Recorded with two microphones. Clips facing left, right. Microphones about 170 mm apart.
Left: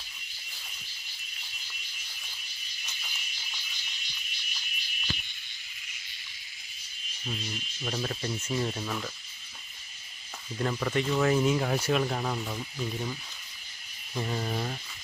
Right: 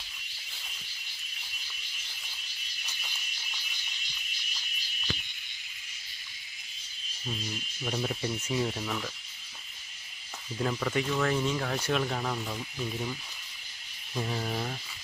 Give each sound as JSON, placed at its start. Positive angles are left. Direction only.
{"t": 7.3, "sound": "speech", "side_deg": 0}
{"t": 10.6, "sound": "speech", "side_deg": 0}
{"t": 14.2, "sound": "speech", "side_deg": 0}